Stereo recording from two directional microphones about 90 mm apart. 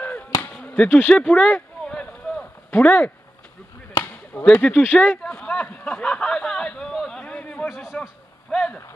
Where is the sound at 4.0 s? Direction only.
25° left (ahead or behind).